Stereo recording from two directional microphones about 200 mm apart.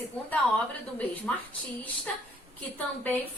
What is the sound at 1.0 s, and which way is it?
A woman's voice, 5° left (ahead or behind).